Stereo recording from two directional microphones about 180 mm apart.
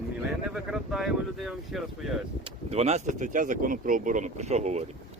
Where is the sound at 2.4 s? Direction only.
35° right (ahead or behind).